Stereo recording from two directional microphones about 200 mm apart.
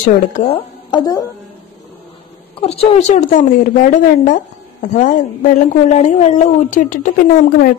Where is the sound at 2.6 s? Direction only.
30° left (ahead or behind).